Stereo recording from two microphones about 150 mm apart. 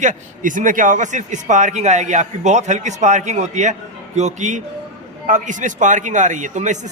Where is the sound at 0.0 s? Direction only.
60° right (ahead or behind).